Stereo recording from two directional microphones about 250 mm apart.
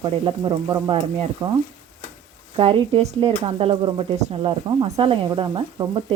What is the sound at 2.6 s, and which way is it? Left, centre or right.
Speech, right.